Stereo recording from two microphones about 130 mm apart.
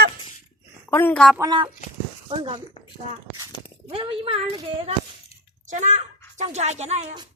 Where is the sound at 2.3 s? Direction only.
45° right (ahead or behind).